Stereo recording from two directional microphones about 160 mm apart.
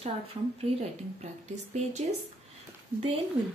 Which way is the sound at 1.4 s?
45° right (ahead or behind).